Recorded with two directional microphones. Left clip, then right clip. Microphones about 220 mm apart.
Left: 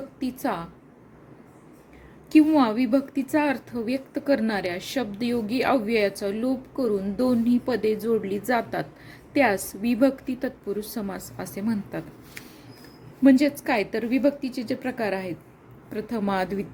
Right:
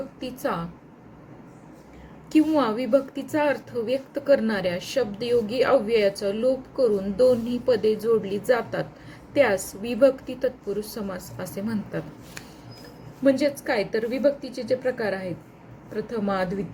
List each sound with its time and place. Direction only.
0.2 s a woman's voice: 35° left (ahead or behind)
2.3 s a woman's voice: 35° left (ahead or behind)
13.2 s a woman's voice: 40° left (ahead or behind)